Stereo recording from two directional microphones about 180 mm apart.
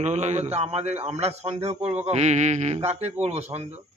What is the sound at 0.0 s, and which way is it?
A man's voice, 40° right (ahead or behind).